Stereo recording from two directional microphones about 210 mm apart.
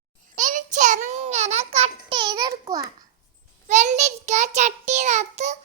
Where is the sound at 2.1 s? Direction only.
20° right (ahead or behind).